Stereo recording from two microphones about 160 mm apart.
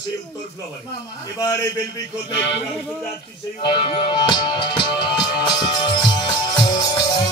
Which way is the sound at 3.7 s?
30° left (ahead or behind).